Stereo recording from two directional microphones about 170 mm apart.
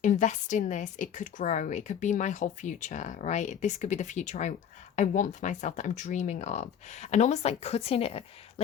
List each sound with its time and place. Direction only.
0.0 s speech: 45° left (ahead or behind)